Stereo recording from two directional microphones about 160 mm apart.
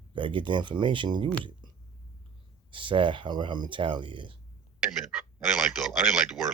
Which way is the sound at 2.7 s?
30° right (ahead or behind).